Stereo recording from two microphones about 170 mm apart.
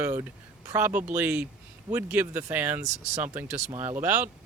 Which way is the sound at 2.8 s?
45° right (ahead or behind).